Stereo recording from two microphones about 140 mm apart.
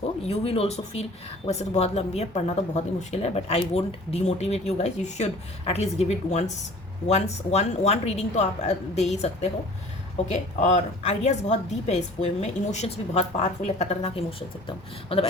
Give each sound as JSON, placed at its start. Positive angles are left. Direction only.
{"t": 0.3, "sound": "a woman's voice", "side_deg": 45}